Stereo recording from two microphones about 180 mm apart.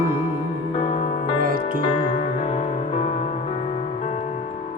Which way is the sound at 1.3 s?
55° right (ahead or behind).